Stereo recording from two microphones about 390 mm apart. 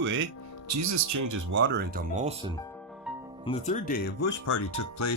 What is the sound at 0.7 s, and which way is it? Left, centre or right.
Speech, right.